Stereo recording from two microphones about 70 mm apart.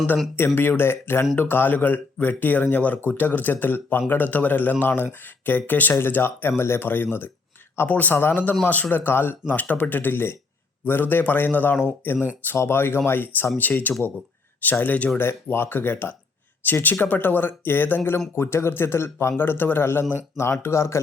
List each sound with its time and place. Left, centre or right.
0.3 s speech: left
15.2 s speech: left